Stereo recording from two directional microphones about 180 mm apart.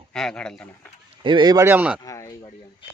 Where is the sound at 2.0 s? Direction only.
15° left (ahead or behind).